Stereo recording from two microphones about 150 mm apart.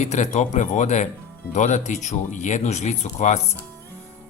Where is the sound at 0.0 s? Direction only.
50° left (ahead or behind).